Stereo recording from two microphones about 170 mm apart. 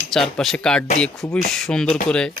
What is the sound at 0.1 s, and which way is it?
Speech, centre (ahead or behind).